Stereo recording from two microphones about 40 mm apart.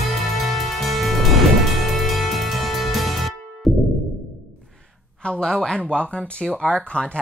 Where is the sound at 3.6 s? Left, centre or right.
Centre.